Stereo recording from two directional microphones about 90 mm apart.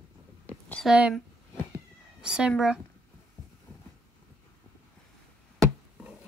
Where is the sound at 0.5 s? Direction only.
15° left (ahead or behind).